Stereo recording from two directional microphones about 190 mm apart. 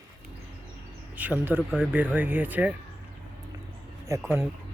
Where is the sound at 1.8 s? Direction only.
10° right (ahead or behind).